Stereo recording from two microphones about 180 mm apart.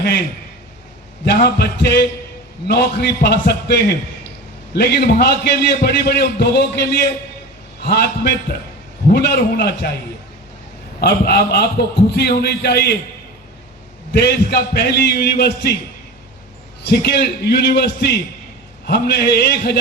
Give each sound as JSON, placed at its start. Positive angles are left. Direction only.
{"t": 1.2, "sound": "a man's voice", "side_deg": 65}
{"t": 11.0, "sound": "a man's voice", "side_deg": 65}
{"t": 14.1, "sound": "a man's voice", "side_deg": 65}
{"t": 16.8, "sound": "a man's voice", "side_deg": 65}